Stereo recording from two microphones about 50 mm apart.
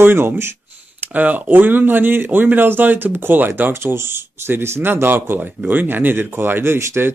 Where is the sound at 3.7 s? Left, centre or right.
Right.